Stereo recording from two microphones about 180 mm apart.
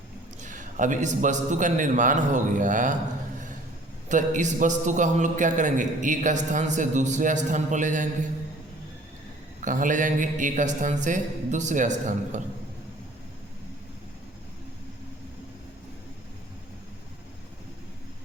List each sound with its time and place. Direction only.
0.4 s a man's voice: 45° right (ahead or behind)
4.1 s a man's voice: 45° right (ahead or behind)
9.6 s a man's voice: 45° right (ahead or behind)